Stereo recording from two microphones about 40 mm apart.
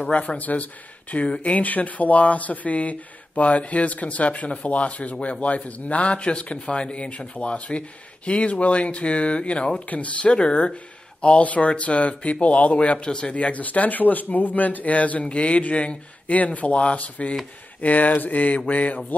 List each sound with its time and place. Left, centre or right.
0.1 s speech: left
1.1 s speech: left
9.8 s speech: left
13.0 s speech: left
13.3 s speech: left